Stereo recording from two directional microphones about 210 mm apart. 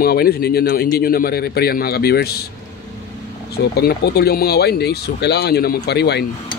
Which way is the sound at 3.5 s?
50° left (ahead or behind).